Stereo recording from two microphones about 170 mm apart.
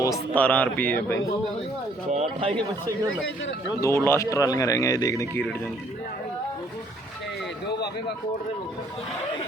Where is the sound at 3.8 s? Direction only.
15° left (ahead or behind).